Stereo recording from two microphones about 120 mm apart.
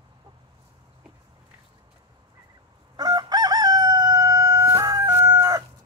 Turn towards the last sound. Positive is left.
turn(degrees=-30)  # may be behind; listen again after turning